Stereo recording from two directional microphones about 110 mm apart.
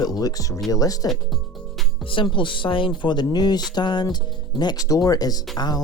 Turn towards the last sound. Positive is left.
turn(degrees=35)  # may be behind; listen again after turning